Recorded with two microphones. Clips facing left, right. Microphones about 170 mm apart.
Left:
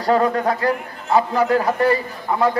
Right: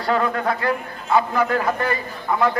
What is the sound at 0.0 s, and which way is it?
A man's voice, 35° left (ahead or behind).